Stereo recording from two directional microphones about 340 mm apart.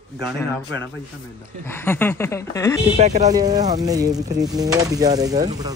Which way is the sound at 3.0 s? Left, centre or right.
Centre.